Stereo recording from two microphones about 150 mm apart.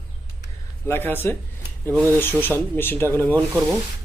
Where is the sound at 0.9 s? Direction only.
15° left (ahead or behind).